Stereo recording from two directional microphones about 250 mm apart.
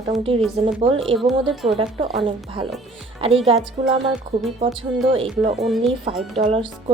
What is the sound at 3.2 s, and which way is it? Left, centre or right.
A woman's voice, right.